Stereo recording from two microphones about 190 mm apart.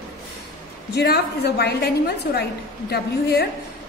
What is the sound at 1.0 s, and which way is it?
A woman's voice, 60° left (ahead or behind).